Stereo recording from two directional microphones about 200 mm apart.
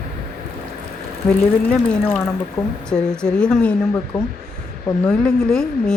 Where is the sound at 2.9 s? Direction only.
5° left (ahead or behind).